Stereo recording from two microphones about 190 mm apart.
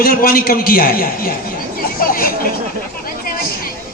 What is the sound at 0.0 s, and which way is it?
A man's voice, 50° left (ahead or behind).